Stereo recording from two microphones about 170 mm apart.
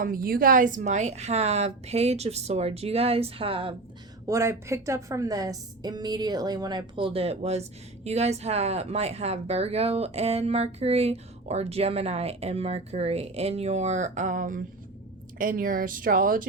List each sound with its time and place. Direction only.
0.0 s a woman's voice: 55° right (ahead or behind); by 3.8 s 30° right (ahead or behind)
4.3 s a woman's voice: 15° right (ahead or behind); by 16.5 s 55° right (ahead or behind)